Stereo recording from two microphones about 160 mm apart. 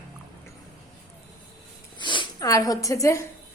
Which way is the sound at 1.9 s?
30° left (ahead or behind).